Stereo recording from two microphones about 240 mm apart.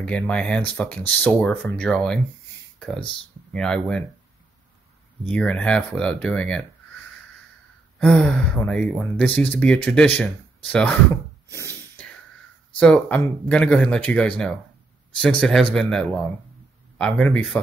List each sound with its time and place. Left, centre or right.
0.0 s speech: centre
5.3 s speech: centre
8.0 s speech: centre
11.4 s snort: centre
12.7 s speech: centre
15.7 s speech: centre